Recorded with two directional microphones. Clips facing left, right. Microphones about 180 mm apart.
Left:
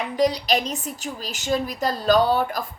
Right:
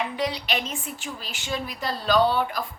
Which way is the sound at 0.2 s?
40° left (ahead or behind).